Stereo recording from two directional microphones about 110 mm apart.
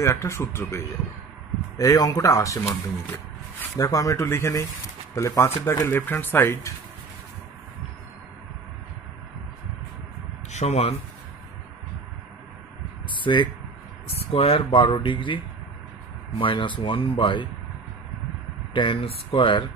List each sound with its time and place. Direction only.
0.0 s speech: 25° left (ahead or behind)
3.7 s speech: 30° left (ahead or behind)
10.5 s speech: 80° left
13.1 s a sound: 45° left (ahead or behind)
14.0 s speech: 60° left (ahead or behind)
18.7 s speech: 50° left (ahead or behind)